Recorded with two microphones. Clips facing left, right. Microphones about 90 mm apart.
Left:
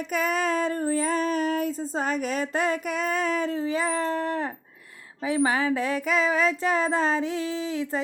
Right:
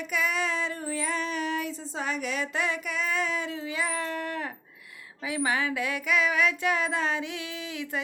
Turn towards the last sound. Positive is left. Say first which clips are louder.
# left 7 dB
turn(degrees=35)  # may be behind; listen again after turning